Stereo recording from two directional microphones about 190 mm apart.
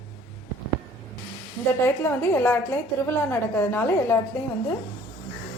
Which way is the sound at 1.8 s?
10° left (ahead or behind).